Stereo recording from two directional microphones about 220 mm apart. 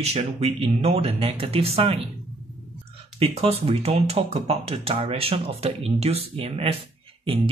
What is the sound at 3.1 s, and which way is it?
Speech, 25° right (ahead or behind).